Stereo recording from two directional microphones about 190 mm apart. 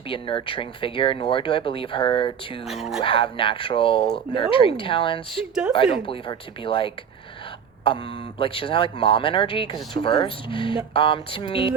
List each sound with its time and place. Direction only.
0.1 s speech: 25° left (ahead or behind)